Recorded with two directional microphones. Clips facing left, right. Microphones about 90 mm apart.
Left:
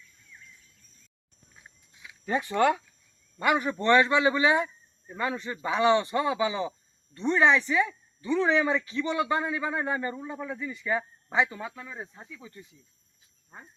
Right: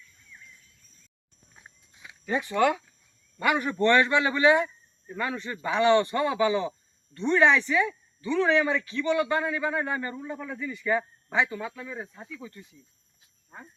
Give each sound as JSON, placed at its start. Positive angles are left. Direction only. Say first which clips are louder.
{"t": 2.2, "sound": "speech", "louder": "even", "side_deg": 40}
{"t": 3.3, "sound": "speech", "louder": "even", "side_deg": 20}
{"t": 5.7, "sound": "speech", "louder": "right 2 dB", "side_deg": 5}
{"t": 8.8, "sound": "speech", "louder": "right 3 dB", "side_deg": 25}